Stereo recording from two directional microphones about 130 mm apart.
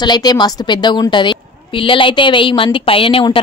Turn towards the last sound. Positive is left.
turn(degrees=40)  # may be behind; listen again after turning